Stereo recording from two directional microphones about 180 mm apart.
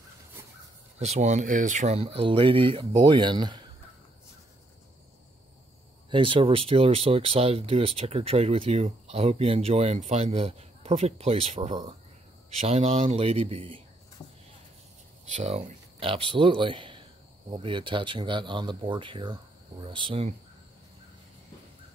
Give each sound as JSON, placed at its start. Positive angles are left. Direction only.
{"t": 0.9, "sound": "speech", "side_deg": -35}
{"t": 6.0, "sound": "speech", "side_deg": -30}
{"t": 15.2, "sound": "a man's voice", "side_deg": -40}